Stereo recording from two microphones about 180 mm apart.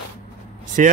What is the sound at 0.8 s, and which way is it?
Speech, 45° right (ahead or behind).